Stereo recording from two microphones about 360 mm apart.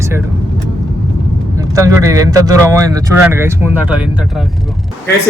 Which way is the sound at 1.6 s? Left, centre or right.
Centre.